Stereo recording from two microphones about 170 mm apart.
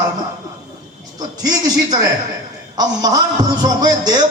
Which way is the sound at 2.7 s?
25° right (ahead or behind).